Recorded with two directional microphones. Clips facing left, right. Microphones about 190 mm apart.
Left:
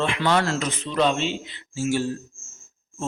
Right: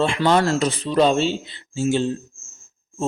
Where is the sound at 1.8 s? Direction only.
20° right (ahead or behind).